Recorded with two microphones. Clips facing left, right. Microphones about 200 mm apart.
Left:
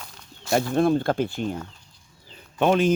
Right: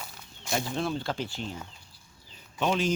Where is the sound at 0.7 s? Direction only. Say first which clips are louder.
Left 10 dB; 50° left (ahead or behind).